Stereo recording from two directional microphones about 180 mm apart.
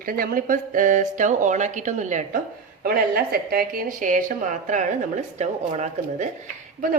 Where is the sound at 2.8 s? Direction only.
55° right (ahead or behind).